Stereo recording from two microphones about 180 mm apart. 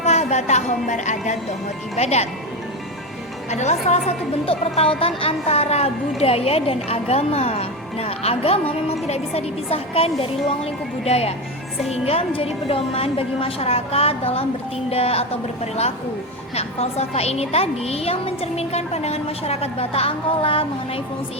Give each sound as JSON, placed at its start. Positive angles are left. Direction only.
{"t": 0.0, "sound": "a woman's voice", "side_deg": 40}
{"t": 3.5, "sound": "a woman's voice", "side_deg": 40}